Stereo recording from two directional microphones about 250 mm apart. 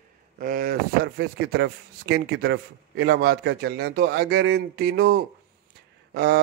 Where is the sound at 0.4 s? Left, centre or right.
Right.